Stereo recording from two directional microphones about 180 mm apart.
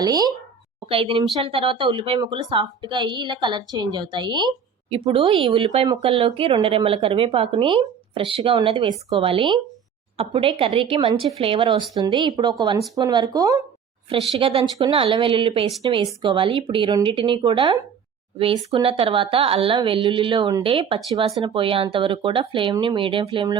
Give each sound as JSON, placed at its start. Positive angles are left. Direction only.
{"t": 0.0, "sound": "speech", "side_deg": -20}
{"t": 14.1, "sound": "speech", "side_deg": -30}